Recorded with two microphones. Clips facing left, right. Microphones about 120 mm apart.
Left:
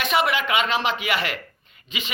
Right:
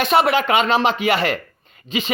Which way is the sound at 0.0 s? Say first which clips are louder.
Right 6 dB; 35° right (ahead or behind).